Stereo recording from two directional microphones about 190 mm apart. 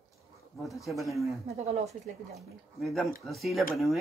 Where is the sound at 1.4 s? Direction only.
35° right (ahead or behind).